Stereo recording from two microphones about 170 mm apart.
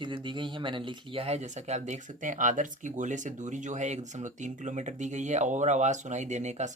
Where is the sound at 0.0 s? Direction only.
30° right (ahead or behind).